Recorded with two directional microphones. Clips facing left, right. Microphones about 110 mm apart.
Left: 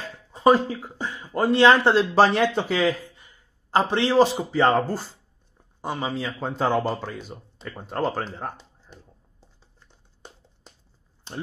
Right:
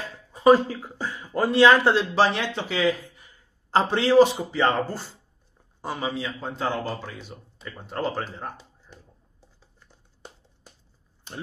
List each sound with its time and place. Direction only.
0.3 s speech: 25° left (ahead or behind)
2.0 s speech: 45° left (ahead or behind)
3.7 s a man's voice: 20° left (ahead or behind)
4.6 s speech: 40° left (ahead or behind)
5.8 s speech: 25° left (ahead or behind)
6.1 s speech: 45° left (ahead or behind)
8.2 s a man's voice: 30° left (ahead or behind)